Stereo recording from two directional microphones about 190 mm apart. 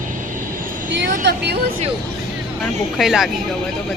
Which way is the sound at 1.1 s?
60° right (ahead or behind).